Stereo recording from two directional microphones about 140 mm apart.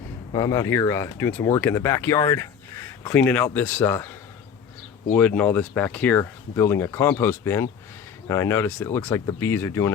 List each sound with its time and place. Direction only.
0.3 s speech: 25° left (ahead or behind)
5.1 s speech: 10° left (ahead or behind)